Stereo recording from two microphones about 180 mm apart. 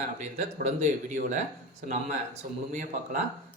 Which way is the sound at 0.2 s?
40° right (ahead or behind).